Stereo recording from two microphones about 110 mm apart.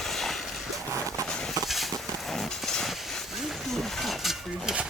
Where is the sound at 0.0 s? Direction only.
Centre (ahead or behind).